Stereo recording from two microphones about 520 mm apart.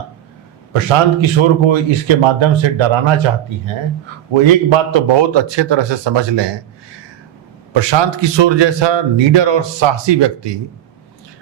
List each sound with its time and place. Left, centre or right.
0.7 s a man's voice: right
4.4 s a man's voice: right
7.7 s a man's voice: right